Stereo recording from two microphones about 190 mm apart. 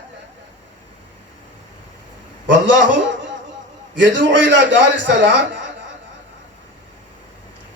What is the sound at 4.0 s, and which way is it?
A man's voice, 75° right (ahead or behind).